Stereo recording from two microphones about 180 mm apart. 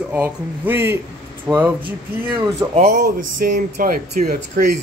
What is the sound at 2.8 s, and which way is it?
Speech, 50° right (ahead or behind).